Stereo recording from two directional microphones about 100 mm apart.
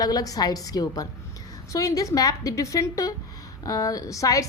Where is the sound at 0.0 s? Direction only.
40° left (ahead or behind).